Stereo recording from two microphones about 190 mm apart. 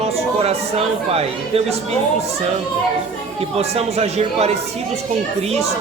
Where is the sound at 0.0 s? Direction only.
35° right (ahead or behind).